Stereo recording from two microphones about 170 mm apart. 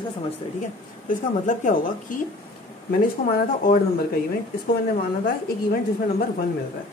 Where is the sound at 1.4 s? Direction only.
50° left (ahead or behind).